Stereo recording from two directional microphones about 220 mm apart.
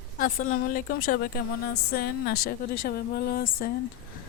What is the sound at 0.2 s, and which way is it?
A woman's voice, 40° left (ahead or behind).